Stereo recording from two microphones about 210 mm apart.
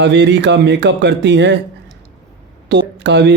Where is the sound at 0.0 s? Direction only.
60° right (ahead or behind).